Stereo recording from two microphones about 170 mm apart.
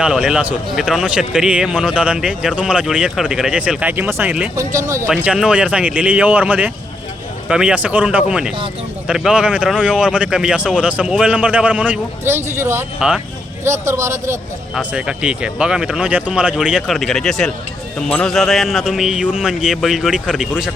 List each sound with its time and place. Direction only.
0.0 s a man's voice: 5° right (ahead or behind)
5.0 s speech: 5° right (ahead or behind)
13.0 s a man's voice: 5° right (ahead or behind)
13.7 s speech: 15° right (ahead or behind)
14.8 s a man's voice: 5° right (ahead or behind)